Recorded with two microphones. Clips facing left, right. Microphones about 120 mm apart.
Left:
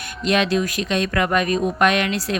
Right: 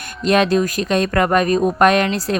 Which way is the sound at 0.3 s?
45° right (ahead or behind).